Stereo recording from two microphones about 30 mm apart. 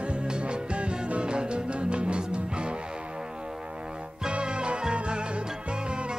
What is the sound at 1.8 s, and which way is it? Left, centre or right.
Music, right.